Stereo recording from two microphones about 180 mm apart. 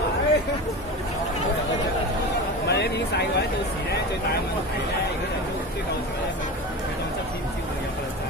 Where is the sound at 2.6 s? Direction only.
70° left (ahead or behind).